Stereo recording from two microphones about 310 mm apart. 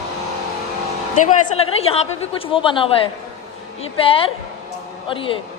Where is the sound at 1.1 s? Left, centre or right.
Centre.